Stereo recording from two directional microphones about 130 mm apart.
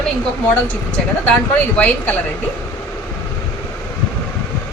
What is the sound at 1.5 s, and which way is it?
Speech, 10° left (ahead or behind).